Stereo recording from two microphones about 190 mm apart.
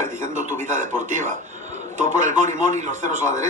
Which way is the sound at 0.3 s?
40° right (ahead or behind).